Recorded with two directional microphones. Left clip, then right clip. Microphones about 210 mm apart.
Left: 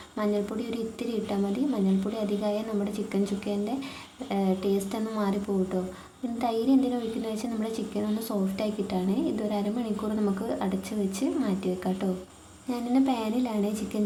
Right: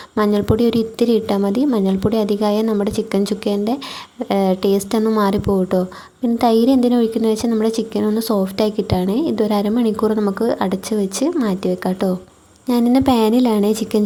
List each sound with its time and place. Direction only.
0.2 s a woman's voice: 40° right (ahead or behind)